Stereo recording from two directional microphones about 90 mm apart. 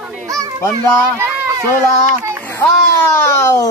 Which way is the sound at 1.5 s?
40° right (ahead or behind).